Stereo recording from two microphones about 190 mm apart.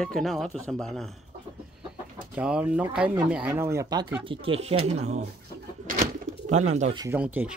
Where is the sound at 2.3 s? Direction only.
5° right (ahead or behind).